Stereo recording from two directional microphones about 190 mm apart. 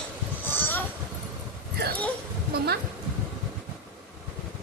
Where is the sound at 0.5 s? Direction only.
10° left (ahead or behind).